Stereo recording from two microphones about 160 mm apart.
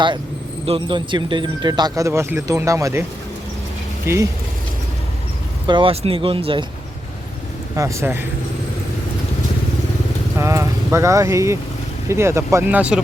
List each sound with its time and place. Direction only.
0.6 s speech: 35° right (ahead or behind); by 3.0 s 20° right (ahead or behind)
4.0 s speech: 20° right (ahead or behind)
5.6 s speech: 30° right (ahead or behind)
7.8 s speech: 20° right (ahead or behind)
10.3 s clip-clop: 20° right (ahead or behind)
12.0 s speech: 15° right (ahead or behind)